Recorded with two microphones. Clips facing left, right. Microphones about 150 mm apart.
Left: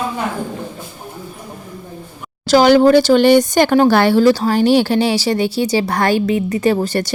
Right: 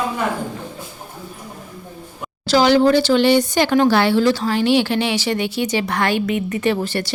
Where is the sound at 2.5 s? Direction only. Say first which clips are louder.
Left 4 dB; 50° left (ahead or behind).